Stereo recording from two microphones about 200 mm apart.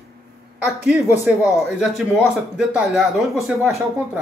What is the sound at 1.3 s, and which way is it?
Speech, 5° right (ahead or behind).